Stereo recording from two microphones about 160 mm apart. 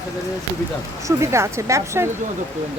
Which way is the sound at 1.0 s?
15° right (ahead or behind).